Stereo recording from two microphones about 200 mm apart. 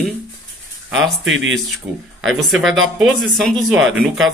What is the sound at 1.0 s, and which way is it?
Speech, 70° right (ahead or behind).